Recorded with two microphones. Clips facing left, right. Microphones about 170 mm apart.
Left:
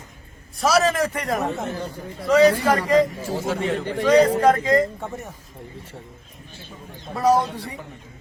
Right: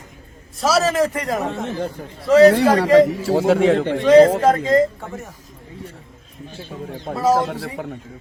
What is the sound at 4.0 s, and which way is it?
Speech, 25° right (ahead or behind).